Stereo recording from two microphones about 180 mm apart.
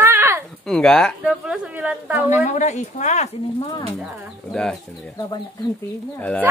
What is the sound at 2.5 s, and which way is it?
Speech, 40° left (ahead or behind).